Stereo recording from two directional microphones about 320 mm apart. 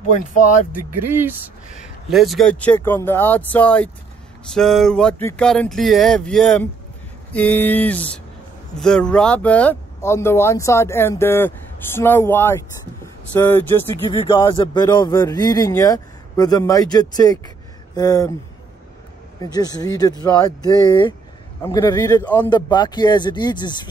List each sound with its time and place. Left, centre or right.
1.1 s speech: centre
19.4 s speech: centre